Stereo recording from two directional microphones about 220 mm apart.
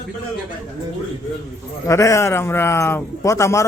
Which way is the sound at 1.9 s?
15° left (ahead or behind).